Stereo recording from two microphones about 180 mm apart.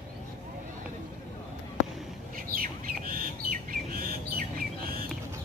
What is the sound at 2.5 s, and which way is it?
Bird, 50° right (ahead or behind).